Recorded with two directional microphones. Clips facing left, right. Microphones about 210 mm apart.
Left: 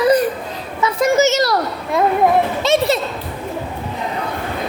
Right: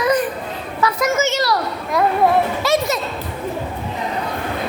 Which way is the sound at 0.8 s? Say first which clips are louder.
Left 4 dB; 30° left (ahead or behind).